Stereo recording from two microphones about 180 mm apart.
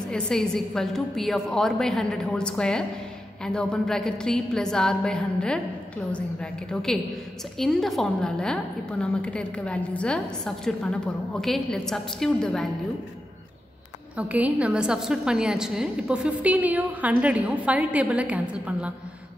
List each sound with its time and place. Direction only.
0.1 s a woman's voice: 5° left (ahead or behind)
14.1 s a woman's voice: 10° right (ahead or behind)